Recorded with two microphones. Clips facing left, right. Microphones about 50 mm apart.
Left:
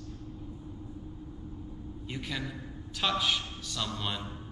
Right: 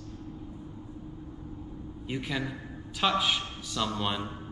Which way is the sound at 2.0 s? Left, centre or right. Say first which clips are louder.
Right 4 dB; centre.